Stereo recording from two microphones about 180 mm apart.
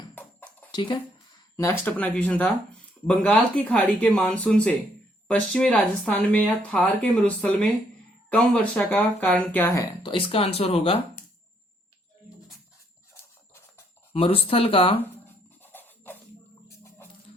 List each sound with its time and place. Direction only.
0.2 s music: 10° left (ahead or behind)
0.7 s speech: 25° left (ahead or behind)
1.5 s speech: 10° left (ahead or behind)
10.0 s speech: 30° left (ahead or behind)
14.1 s speech: 30° left (ahead or behind)
15.6 s music: 10° left (ahead or behind)
16.6 s a sound: 15° left (ahead or behind)